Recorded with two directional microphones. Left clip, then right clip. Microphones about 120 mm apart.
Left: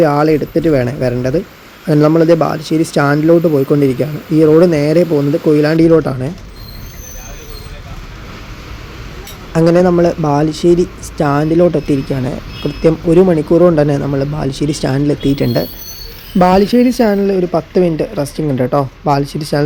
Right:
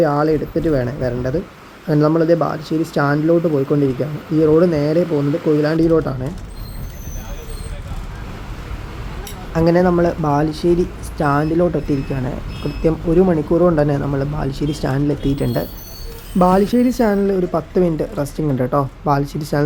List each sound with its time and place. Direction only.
0.0 s speech: 45° left (ahead or behind)
9.5 s speech: 40° left (ahead or behind); by 19.6 s 25° left (ahead or behind)